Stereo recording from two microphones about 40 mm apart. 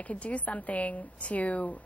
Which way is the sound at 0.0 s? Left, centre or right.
Left.